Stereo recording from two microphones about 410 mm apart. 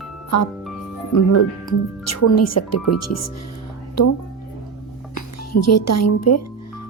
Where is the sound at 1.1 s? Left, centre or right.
Left.